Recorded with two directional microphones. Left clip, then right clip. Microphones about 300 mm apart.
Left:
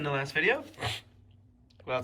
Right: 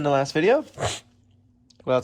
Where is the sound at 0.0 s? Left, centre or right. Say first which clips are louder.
Right 8 dB; centre.